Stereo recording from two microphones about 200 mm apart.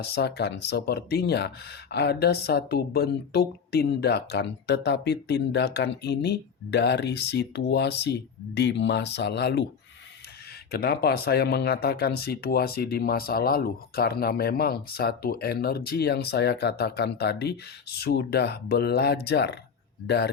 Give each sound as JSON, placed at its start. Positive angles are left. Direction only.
{"t": 0.0, "sound": "speech", "side_deg": 55}
{"t": 10.7, "sound": "speech", "side_deg": 50}